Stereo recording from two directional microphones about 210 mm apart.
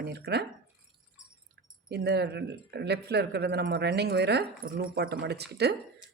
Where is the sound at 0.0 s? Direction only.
50° right (ahead or behind).